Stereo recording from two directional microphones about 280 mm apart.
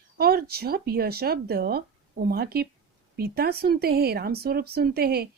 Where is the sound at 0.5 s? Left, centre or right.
Right.